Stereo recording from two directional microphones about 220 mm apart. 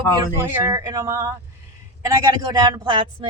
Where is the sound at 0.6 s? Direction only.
15° right (ahead or behind).